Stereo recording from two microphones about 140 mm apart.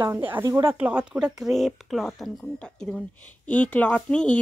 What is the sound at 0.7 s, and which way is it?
A woman's voice, 10° right (ahead or behind).